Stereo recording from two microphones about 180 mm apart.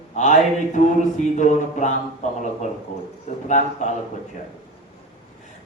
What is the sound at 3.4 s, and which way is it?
Speech, 40° left (ahead or behind).